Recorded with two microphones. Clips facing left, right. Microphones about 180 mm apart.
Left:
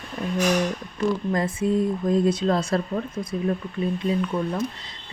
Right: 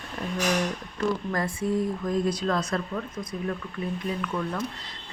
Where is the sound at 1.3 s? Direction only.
20° left (ahead or behind).